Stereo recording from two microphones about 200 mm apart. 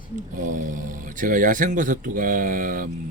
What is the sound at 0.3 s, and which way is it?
Speech, 40° right (ahead or behind).